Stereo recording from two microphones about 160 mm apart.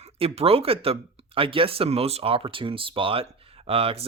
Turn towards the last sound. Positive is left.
turn(degrees=-40)  # may be behind; listen again after turning